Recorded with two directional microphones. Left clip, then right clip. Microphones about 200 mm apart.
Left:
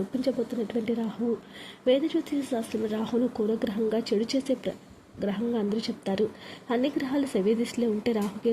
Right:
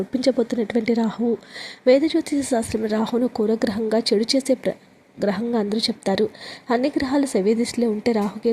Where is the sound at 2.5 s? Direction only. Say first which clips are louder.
Right 9 dB; 25° right (ahead or behind).